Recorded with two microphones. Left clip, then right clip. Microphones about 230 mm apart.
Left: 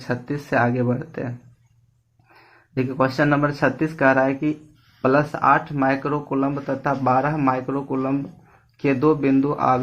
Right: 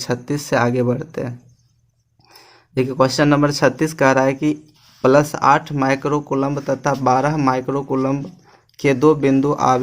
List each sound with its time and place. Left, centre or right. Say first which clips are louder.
0.0 s speech: right 4 dB; right
2.3 s speech: right 5 dB; right